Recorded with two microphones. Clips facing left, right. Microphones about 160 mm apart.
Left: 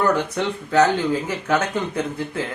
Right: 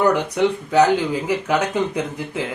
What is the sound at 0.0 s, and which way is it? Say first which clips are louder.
Speech: right 3 dB; 15° right (ahead or behind).